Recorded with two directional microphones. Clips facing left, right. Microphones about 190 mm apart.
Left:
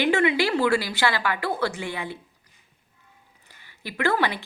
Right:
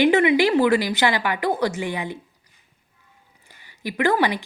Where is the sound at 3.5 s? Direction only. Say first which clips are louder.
Right 7 dB; 15° right (ahead or behind).